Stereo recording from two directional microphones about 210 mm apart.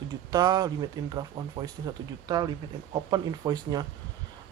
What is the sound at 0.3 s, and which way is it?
Speech, 20° right (ahead or behind).